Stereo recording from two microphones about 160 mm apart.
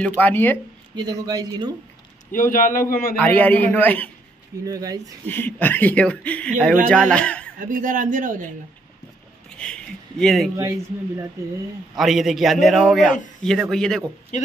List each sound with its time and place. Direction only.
0.0 s speech: 10° left (ahead or behind)
0.9 s speech: 25° right (ahead or behind)
2.3 s a man's voice: 55° left (ahead or behind)
3.2 s speech: 10° left (ahead or behind)
4.6 s speech: 20° right (ahead or behind)
5.2 s speech: 10° left (ahead or behind)
7.5 s speech: 55° right (ahead or behind)
9.6 s speech: 5° left (ahead or behind)
11.9 s a man's voice: centre (ahead or behind)